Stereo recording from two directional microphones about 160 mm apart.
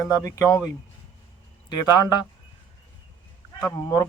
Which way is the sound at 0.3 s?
20° left (ahead or behind).